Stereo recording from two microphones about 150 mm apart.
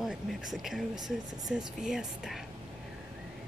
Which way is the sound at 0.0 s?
Centre (ahead or behind).